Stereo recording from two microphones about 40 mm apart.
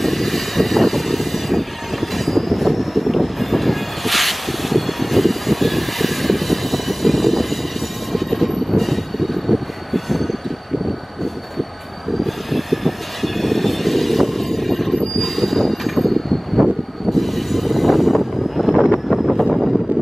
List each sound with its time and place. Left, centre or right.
0.0 s vehicle: centre
8.1 s train: centre
12.2 s vehicle: centre
15.1 s train: centre